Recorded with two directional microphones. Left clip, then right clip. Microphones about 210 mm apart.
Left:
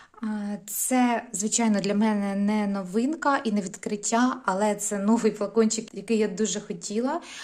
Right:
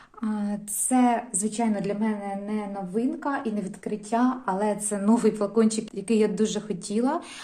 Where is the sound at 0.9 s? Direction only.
20° left (ahead or behind).